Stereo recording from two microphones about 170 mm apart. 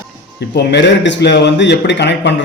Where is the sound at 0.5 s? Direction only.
90° left.